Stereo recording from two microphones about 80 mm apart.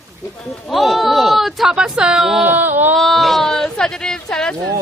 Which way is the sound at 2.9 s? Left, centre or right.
Centre.